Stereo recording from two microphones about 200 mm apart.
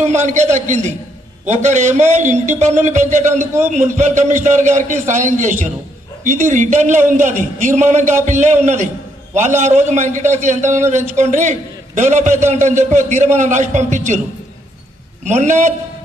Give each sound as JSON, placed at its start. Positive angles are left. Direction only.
{"t": 0.2, "sound": "a man's voice", "side_deg": -35}
{"t": 15.2, "sound": "a man's voice", "side_deg": -35}